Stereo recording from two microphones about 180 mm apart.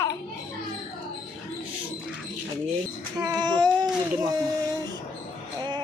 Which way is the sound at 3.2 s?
5° right (ahead or behind).